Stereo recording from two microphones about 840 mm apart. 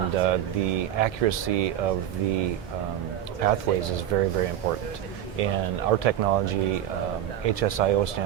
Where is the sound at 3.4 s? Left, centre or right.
Right.